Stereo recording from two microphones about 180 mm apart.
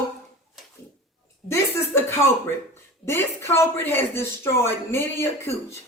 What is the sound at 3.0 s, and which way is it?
Speech, 15° left (ahead or behind).